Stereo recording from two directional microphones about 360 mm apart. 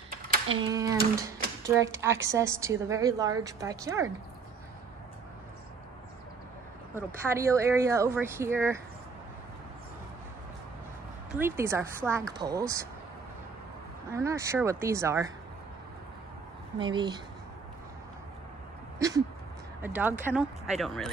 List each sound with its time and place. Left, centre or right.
0.1 s a sound: right
0.7 s a woman's voice: centre
7.2 s a woman's voice: centre
11.3 s a woman's voice: centre
14.1 s a woman's voice: centre
16.7 s a woman's voice: centre
18.9 s a sound: centre
19.8 s speech: centre